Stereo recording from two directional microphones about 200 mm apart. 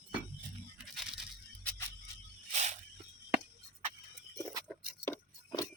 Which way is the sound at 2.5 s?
35° right (ahead or behind).